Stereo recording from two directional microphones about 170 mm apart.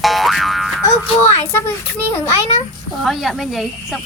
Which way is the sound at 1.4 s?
15° left (ahead or behind).